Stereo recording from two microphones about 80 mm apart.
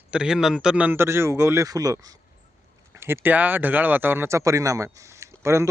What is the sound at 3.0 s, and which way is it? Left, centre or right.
Speech, right.